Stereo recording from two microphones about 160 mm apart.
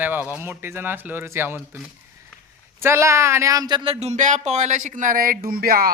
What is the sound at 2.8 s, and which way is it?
Speech, 15° right (ahead or behind).